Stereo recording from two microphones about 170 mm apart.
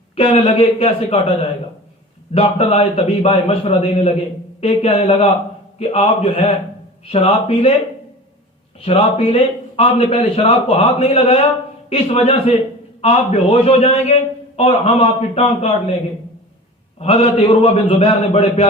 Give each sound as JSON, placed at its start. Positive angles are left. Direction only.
{"t": 0.2, "sound": "a man's voice", "side_deg": 35}
{"t": 2.3, "sound": "a man's voice", "side_deg": 35}
{"t": 8.8, "sound": "a man's voice", "side_deg": 35}
{"t": 17.0, "sound": "a man's voice", "side_deg": 35}